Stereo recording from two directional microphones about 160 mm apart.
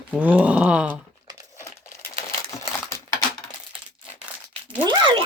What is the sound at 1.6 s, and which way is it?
Crumpling, 20° left (ahead or behind).